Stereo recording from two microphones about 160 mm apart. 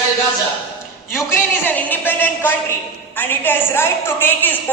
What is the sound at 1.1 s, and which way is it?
A woman's voice, 15° left (ahead or behind).